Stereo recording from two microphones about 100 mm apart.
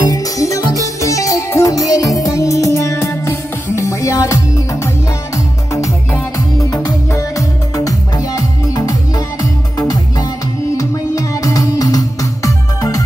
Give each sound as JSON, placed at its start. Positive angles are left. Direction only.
{"t": 0.0, "sound": "music", "side_deg": 40}